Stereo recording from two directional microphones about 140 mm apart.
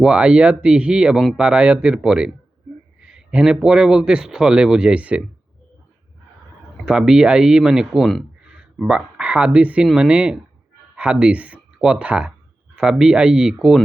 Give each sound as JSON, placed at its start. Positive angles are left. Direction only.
{"t": 0.0, "sound": "speech", "side_deg": -5}
{"t": 6.8, "sound": "speech", "side_deg": -5}